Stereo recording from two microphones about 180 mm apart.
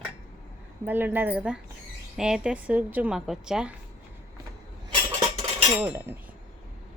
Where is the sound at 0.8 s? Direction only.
10° right (ahead or behind).